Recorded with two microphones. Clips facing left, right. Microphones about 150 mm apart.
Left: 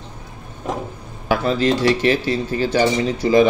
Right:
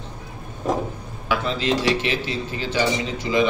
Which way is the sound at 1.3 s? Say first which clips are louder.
Left 5 dB; 45° left (ahead or behind).